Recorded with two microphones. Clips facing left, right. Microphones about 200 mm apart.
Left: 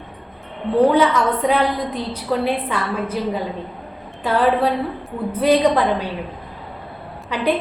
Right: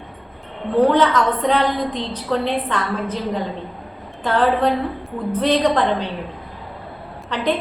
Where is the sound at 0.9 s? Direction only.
10° left (ahead or behind).